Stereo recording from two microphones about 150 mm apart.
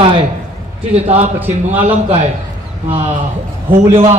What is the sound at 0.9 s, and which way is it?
A man's voice, 45° right (ahead or behind).